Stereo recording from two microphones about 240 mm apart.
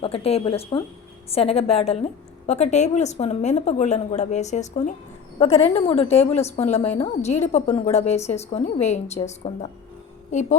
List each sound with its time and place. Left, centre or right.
0.0 s a woman's voice: left